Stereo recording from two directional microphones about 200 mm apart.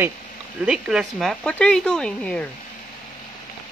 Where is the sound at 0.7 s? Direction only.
5° right (ahead or behind).